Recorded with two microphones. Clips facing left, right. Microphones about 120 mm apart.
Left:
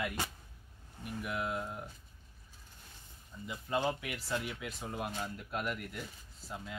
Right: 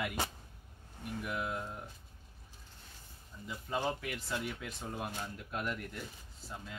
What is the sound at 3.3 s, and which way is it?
Speech, 5° left (ahead or behind).